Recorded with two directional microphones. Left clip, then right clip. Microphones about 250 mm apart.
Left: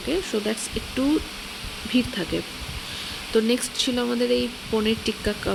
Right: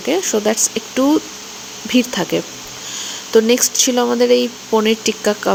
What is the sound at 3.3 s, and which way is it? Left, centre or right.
Speech, centre.